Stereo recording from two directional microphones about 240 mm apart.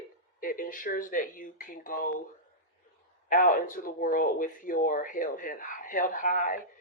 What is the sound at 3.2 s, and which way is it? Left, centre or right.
Speech, left.